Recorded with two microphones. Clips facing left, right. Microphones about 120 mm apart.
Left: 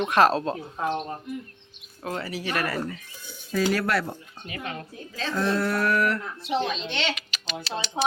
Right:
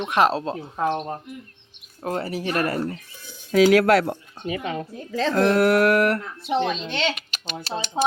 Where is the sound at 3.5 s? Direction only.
85° right.